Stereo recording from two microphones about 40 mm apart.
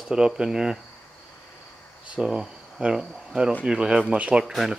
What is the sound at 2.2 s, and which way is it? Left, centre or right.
Speech, right.